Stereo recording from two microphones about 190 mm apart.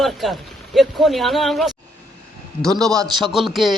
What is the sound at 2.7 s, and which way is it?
Speech, 20° right (ahead or behind).